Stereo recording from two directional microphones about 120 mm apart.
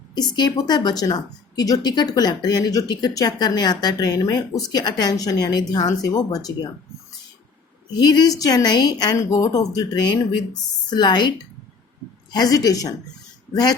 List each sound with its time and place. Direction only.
0.1 s a woman's voice: 35° left (ahead or behind)
7.9 s a woman's voice: 35° left (ahead or behind)
12.3 s a woman's voice: 35° left (ahead or behind)